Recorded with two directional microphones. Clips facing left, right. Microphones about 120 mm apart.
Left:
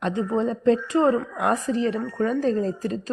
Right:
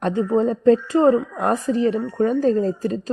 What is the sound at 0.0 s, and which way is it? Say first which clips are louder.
A woman's voice: right 4 dB; 30° right (ahead or behind).